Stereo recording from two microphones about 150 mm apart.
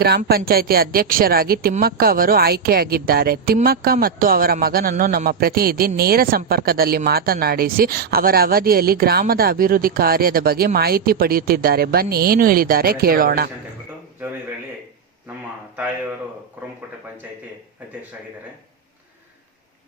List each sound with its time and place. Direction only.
0.3 s a woman's voice: 90° right
15.7 s speech: 10° right (ahead or behind)